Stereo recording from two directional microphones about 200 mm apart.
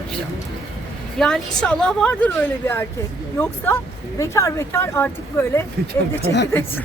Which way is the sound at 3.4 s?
10° left (ahead or behind).